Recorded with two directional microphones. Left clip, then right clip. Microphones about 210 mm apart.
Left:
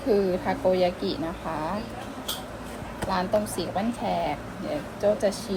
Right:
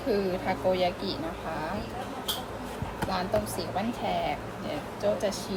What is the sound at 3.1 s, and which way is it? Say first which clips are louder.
A woman's voice: left 4 dB; 30° left (ahead or behind).